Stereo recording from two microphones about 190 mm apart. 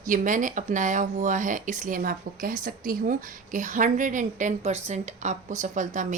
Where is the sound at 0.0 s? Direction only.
45° right (ahead or behind).